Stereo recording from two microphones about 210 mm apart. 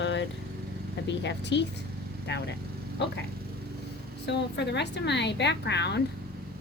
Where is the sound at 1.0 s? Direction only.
55° left (ahead or behind).